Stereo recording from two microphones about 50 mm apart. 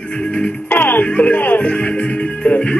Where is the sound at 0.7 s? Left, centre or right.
Left.